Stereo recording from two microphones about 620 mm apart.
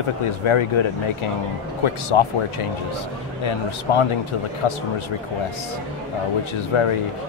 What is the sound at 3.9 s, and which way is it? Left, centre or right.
Speech, left.